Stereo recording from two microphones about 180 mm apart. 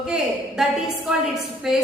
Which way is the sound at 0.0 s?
5° right (ahead or behind).